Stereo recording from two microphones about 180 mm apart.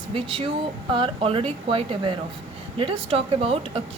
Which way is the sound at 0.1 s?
30° right (ahead or behind).